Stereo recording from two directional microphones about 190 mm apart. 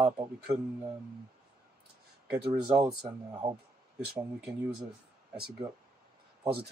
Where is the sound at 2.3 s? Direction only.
5° right (ahead or behind).